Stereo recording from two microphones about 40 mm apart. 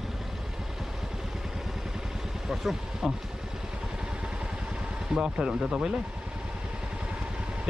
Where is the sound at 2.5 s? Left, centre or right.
Centre.